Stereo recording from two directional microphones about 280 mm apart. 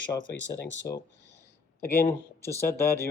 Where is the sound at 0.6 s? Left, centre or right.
Left.